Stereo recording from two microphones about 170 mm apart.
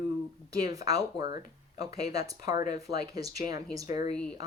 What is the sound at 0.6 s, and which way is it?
Speech, 20° right (ahead or behind).